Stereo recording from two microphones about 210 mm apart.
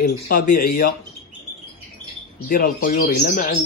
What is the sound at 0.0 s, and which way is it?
Speech, 40° left (ahead or behind).